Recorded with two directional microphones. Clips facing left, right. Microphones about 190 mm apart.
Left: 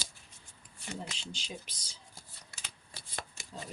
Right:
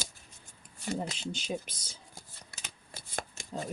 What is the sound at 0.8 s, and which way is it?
Speech, 40° right (ahead or behind).